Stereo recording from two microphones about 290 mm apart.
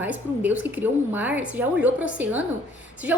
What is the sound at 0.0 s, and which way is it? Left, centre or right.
A woman's voice, centre.